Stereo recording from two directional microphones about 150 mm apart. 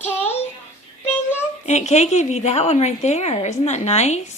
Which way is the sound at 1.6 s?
50° left (ahead or behind).